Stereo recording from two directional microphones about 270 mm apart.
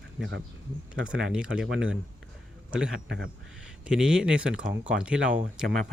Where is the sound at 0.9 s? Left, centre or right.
Centre.